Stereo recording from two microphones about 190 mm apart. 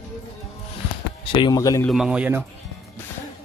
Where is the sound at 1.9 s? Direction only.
Centre (ahead or behind).